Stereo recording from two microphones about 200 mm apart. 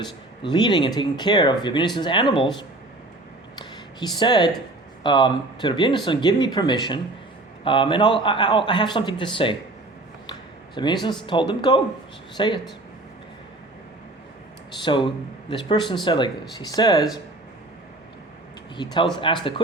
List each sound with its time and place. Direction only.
0.4 s speech: 25° left (ahead or behind)
3.5 s a sound: 20° left (ahead or behind)
5.0 s speech: 25° left (ahead or behind)
10.8 s speech: 25° left (ahead or behind)
14.8 s speech: 25° left (ahead or behind)
18.8 s speech: 20° left (ahead or behind)